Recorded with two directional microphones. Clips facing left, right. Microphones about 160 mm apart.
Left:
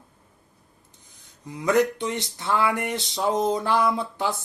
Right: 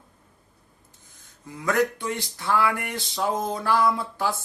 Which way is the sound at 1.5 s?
20° left (ahead or behind).